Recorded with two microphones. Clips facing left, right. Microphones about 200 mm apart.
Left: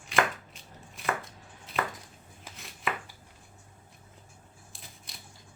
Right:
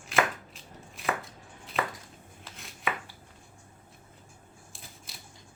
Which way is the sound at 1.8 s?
Centre (ahead or behind).